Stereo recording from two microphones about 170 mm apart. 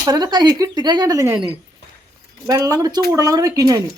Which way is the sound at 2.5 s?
20° right (ahead or behind).